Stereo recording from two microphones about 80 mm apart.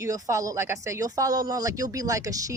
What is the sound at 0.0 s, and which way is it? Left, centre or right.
Speech, right.